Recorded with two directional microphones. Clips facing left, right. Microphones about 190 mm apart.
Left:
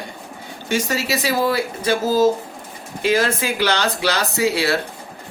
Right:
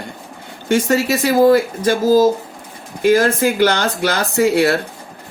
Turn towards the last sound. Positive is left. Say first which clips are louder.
# right 5 dB
turn(degrees=-50)  # may be behind; listen again after turning